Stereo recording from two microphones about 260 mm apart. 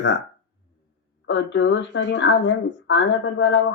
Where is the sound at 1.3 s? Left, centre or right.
Left.